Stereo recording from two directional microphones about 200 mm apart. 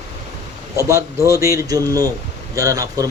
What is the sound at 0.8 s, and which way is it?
Speech, 15° right (ahead or behind).